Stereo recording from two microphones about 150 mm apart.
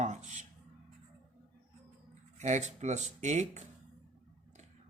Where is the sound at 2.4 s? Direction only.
50° right (ahead or behind).